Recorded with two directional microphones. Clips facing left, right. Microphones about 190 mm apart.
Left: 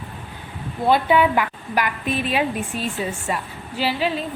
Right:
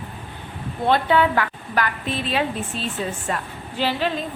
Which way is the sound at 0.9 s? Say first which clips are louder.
Left 1 dB; 10° left (ahead or behind).